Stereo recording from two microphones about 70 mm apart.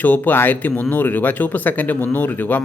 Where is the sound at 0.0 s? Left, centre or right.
Left.